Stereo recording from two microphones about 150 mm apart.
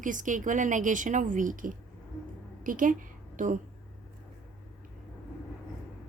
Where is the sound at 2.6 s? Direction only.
65° right (ahead or behind).